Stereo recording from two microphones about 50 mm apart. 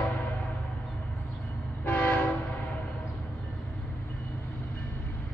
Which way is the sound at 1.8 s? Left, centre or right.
Left.